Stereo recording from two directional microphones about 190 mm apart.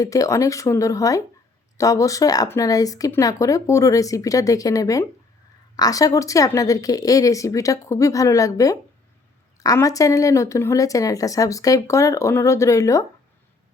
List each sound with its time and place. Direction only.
0.0 s speech: 15° left (ahead or behind)